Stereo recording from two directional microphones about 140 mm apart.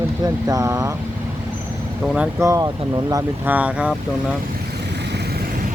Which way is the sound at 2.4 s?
25° right (ahead or behind).